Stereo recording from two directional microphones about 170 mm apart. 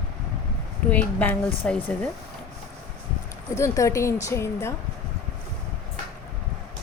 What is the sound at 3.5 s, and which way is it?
A woman's voice, 20° left (ahead or behind).